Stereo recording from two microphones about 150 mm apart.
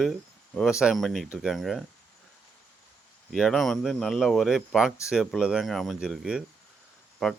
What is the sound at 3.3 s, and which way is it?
Speech, centre (ahead or behind).